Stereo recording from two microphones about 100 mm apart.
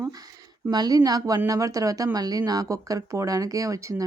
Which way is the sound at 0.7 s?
40° right (ahead or behind).